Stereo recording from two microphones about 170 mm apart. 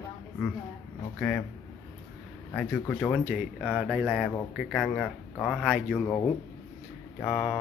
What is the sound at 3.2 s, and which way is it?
Speech, 5° right (ahead or behind).